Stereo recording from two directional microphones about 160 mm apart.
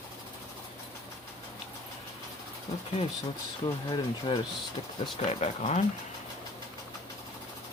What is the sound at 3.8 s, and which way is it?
Speech, 30° left (ahead or behind).